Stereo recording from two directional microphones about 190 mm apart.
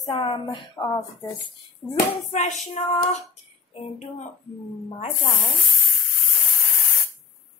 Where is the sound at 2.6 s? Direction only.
35° left (ahead or behind).